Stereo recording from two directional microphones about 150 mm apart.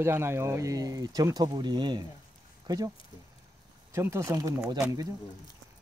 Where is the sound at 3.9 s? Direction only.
20° right (ahead or behind).